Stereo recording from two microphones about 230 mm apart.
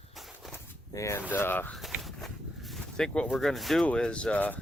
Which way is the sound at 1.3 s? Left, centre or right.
Centre.